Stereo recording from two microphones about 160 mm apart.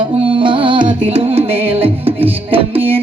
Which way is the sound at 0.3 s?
30° right (ahead or behind).